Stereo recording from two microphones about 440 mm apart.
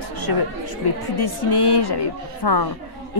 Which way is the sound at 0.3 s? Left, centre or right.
Left.